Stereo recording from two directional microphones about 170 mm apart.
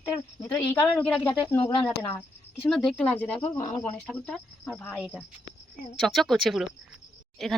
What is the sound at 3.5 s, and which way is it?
Speech, 20° left (ahead or behind).